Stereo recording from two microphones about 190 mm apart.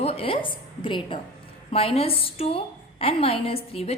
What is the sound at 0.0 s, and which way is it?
A woman's voice, 30° left (ahead or behind).